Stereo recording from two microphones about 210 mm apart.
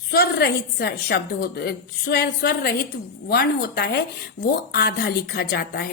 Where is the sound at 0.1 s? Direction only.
45° left (ahead or behind).